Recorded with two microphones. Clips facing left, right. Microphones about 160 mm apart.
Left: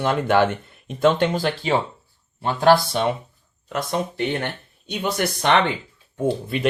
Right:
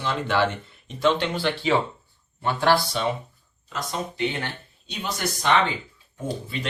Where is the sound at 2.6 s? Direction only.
55° left (ahead or behind).